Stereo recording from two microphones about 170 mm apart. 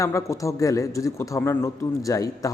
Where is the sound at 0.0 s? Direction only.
15° left (ahead or behind).